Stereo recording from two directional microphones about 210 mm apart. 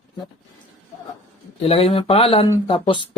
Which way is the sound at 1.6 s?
30° left (ahead or behind).